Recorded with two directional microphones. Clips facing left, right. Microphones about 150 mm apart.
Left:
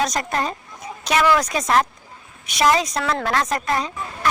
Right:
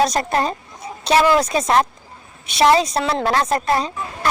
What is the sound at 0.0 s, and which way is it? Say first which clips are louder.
A woman's voice: right 4 dB; 30° right (ahead or behind).